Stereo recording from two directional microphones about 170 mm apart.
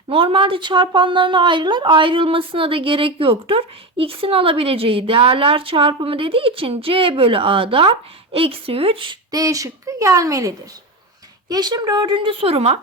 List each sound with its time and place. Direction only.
0.1 s speech: 30° right (ahead or behind)